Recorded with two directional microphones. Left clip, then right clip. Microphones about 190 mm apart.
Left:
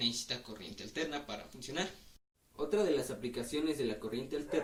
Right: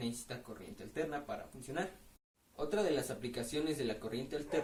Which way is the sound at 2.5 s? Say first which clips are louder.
Left 2 dB; 20° right (ahead or behind).